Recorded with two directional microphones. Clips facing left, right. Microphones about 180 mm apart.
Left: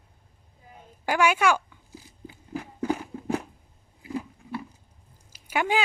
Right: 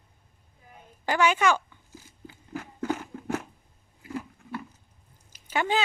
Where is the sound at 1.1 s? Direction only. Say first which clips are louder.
Left 1 dB; 10° left (ahead or behind).